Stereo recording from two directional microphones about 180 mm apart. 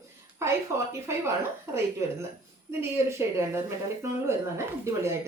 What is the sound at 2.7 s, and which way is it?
A woman's voice, 15° right (ahead or behind).